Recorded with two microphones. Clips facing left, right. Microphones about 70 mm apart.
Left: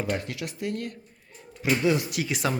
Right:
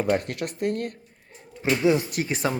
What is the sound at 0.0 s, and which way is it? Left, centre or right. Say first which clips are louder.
Speech: right 5 dB; right.